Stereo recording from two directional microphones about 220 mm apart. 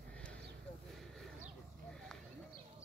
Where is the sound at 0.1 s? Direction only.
5° left (ahead or behind).